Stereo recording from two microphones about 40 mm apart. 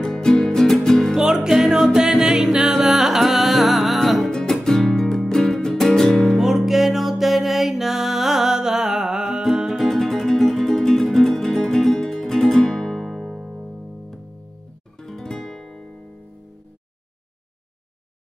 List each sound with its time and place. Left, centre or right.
0.0 s music: centre
1.1 s music: centre
4.5 s music: centre
6.3 s music: centre
9.8 s music: centre
13.5 s music: centre
15.0 s music: centre